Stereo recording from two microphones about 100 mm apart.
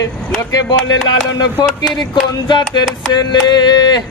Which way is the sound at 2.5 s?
50° left (ahead or behind).